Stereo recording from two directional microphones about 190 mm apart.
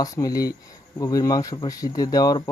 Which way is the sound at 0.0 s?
20° left (ahead or behind).